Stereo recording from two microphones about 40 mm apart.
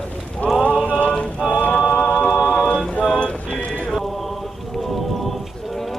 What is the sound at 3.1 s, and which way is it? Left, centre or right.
Music, left.